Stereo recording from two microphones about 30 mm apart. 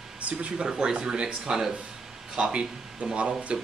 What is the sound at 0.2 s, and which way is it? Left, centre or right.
Speech, right.